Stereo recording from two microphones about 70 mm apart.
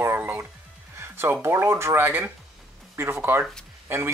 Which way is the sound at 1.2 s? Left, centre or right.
Right.